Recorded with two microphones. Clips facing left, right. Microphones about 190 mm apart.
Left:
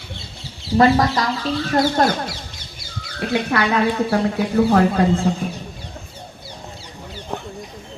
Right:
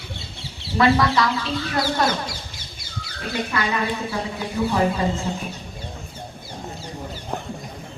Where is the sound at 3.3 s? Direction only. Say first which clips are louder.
Left 5 dB; 65° left (ahead or behind).